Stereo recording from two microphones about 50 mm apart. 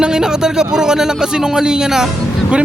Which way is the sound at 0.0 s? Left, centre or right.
Centre.